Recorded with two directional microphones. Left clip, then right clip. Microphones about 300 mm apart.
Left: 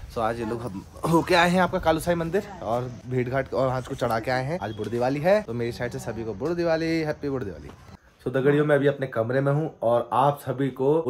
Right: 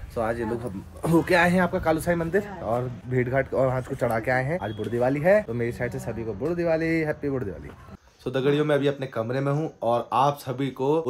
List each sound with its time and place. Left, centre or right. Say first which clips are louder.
0.1 s speech: even; centre
8.2 s speech: left 2 dB; centre